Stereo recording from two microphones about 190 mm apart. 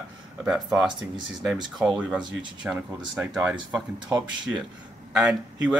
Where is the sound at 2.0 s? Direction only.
5° right (ahead or behind).